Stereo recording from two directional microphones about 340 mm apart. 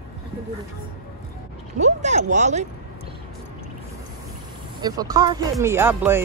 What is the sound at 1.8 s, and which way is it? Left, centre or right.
Speech, right.